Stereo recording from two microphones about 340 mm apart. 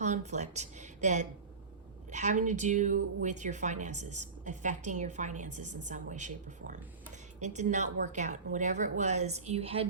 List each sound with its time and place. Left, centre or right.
0.0 s a woman's voice: right